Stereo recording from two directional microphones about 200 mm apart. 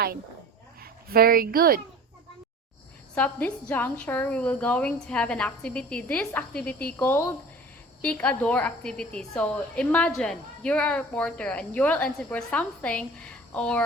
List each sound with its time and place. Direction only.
0.8 s speech: 50° right (ahead or behind)
3.2 s a woman's voice: 5° left (ahead or behind)